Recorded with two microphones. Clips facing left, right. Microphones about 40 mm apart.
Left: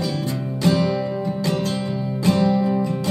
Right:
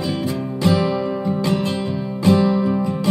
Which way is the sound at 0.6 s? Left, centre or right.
Centre.